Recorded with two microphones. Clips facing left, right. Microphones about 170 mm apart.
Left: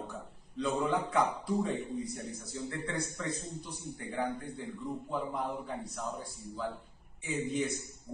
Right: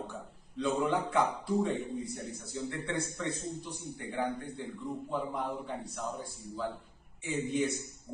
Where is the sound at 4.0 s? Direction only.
Centre (ahead or behind).